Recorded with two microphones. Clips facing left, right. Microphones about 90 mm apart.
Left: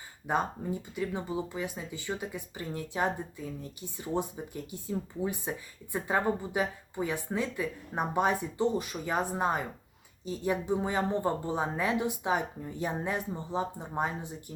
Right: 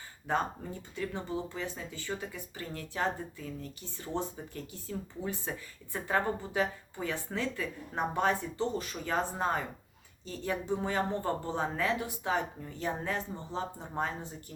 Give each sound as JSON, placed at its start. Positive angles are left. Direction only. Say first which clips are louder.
{"t": 0.3, "sound": "speech", "louder": "left 2 dB", "side_deg": 15}